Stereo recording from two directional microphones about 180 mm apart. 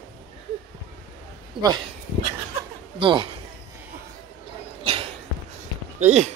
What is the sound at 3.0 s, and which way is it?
Speech, 30° right (ahead or behind).